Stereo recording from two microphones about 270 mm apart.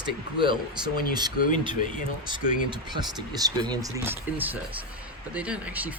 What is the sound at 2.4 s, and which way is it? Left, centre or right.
Speech, left.